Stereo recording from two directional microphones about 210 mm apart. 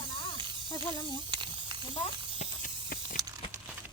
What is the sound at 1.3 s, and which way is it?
Snake, 20° right (ahead or behind).